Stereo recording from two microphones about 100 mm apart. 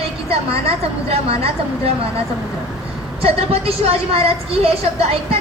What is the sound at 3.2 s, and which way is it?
A woman's voice, 75° right (ahead or behind).